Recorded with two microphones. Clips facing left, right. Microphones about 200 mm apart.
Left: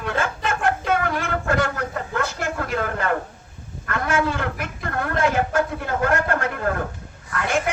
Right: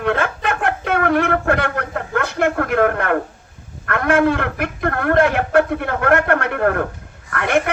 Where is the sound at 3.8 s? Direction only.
60° right (ahead or behind).